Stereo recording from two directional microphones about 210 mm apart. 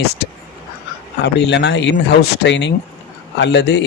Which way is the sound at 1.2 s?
55° left (ahead or behind).